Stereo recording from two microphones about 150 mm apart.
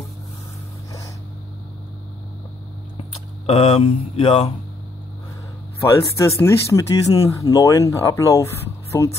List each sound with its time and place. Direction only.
3.0 s speech: 40° left (ahead or behind)
5.8 s speech: 20° left (ahead or behind)